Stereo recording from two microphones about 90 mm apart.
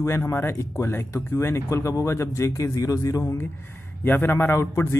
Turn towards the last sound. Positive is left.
turn(degrees=25)  # may be behind; listen again after turning